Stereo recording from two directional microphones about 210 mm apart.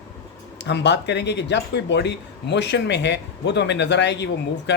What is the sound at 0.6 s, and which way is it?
Speech, 55° left (ahead or behind).